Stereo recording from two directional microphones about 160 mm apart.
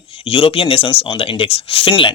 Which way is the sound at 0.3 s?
35° left (ahead or behind).